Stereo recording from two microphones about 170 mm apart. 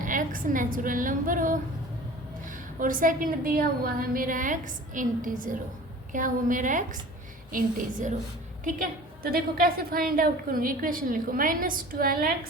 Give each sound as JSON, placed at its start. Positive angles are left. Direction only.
{"t": 0.0, "sound": "a woman's voice", "side_deg": -50}
{"t": 2.7, "sound": "a woman's voice", "side_deg": -50}